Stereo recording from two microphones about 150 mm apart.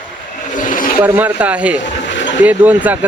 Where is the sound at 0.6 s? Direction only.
65° left (ahead or behind).